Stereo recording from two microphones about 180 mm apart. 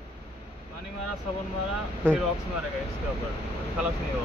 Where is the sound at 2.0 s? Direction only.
10° right (ahead or behind).